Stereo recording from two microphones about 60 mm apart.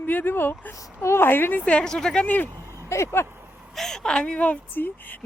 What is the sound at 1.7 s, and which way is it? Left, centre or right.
Speech, centre.